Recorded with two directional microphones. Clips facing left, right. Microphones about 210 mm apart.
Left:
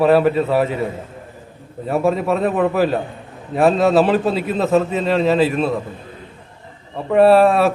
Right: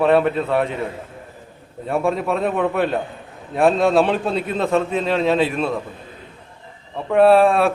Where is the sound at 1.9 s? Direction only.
Centre (ahead or behind).